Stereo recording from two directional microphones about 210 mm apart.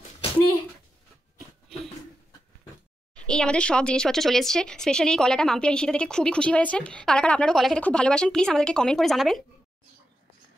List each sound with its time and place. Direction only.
3.2 s speech: 5° left (ahead or behind)